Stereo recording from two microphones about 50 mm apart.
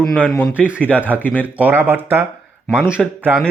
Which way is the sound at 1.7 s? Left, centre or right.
Right.